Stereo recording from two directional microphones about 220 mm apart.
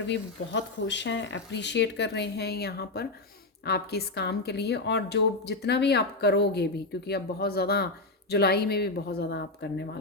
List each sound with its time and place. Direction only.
0.1 s speech: 55° left (ahead or behind)